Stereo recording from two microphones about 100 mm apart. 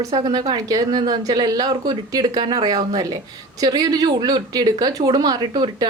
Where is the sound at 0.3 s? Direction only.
45° right (ahead or behind).